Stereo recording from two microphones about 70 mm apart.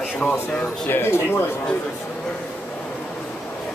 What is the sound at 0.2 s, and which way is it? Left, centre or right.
Speech, left.